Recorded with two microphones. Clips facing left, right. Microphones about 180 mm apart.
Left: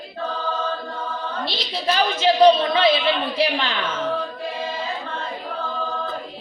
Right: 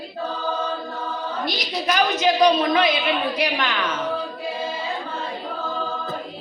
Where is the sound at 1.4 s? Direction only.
30° left (ahead or behind).